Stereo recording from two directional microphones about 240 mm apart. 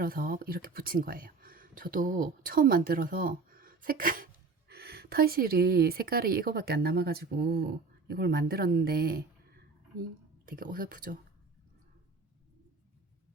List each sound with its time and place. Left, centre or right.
0.0 s speech: right
10.4 s speech: right